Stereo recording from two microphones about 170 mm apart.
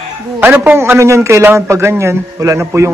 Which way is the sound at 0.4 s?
15° right (ahead or behind).